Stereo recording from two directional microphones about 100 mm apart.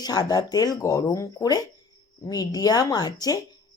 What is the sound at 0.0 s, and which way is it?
Speech, 40° left (ahead or behind).